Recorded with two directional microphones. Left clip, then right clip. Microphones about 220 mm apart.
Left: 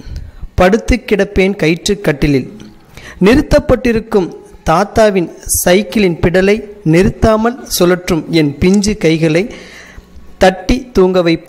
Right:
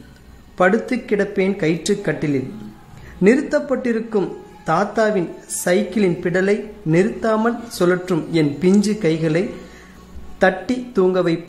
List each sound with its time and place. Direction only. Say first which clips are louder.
0.6 s a man's voice: left 6 dB; 35° left (ahead or behind)